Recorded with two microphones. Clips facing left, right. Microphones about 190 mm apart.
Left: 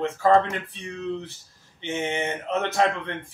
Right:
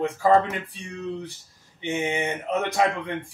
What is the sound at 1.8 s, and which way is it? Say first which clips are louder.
Speech: right 1 dB; 15° right (ahead or behind).